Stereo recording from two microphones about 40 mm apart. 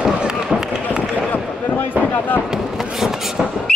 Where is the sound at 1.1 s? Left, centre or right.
Left.